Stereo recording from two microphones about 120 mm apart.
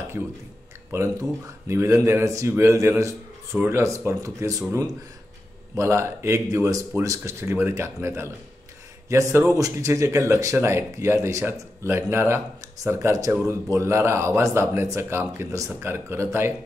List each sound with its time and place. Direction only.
0.9 s speech: 25° right (ahead or behind)